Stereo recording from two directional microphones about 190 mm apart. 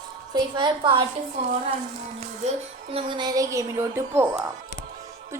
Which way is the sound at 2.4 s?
35° right (ahead or behind).